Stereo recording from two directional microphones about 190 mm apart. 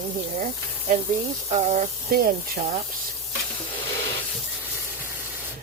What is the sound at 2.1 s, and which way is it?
Speech, 50° right (ahead or behind).